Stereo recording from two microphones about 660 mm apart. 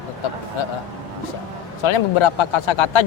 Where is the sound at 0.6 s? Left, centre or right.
Left.